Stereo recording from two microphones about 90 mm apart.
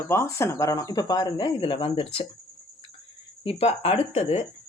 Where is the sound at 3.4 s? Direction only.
90° left.